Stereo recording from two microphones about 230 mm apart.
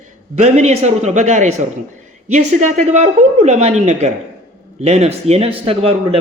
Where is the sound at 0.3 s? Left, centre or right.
Right.